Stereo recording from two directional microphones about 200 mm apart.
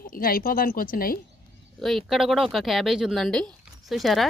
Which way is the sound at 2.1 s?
Centre (ahead or behind).